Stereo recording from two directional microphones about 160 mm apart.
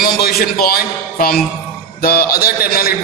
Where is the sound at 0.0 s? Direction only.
70° left (ahead or behind).